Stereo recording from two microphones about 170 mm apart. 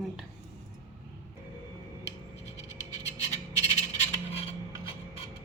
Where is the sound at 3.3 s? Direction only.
40° left (ahead or behind).